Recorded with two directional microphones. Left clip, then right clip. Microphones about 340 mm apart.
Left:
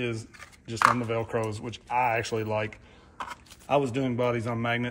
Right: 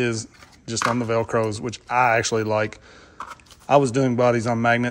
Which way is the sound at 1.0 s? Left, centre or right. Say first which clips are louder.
Right 8 dB; centre.